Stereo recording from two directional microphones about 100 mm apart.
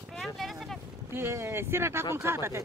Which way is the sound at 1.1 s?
25° right (ahead or behind).